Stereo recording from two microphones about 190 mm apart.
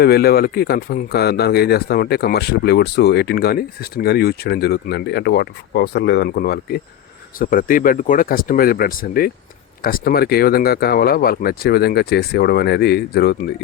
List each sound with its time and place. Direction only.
0.0 s speech: 55° left (ahead or behind)